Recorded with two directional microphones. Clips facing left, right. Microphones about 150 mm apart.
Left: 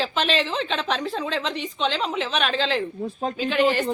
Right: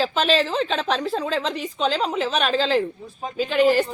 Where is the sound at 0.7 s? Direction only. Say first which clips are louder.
Right 2 dB; centre (ahead or behind).